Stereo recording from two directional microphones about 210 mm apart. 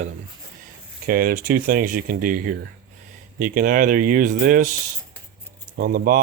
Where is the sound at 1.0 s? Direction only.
45° right (ahead or behind).